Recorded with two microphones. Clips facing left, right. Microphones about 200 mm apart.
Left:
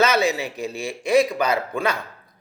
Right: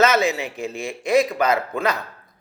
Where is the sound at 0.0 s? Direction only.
30° left (ahead or behind).